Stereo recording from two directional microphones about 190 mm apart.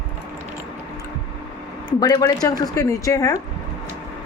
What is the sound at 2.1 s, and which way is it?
A woman's voice, 20° left (ahead or behind).